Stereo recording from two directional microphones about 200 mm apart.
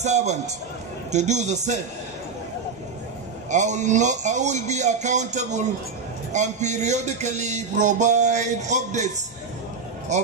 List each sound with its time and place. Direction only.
0.0 s music: 35° right (ahead or behind)
3.4 s music: 35° right (ahead or behind)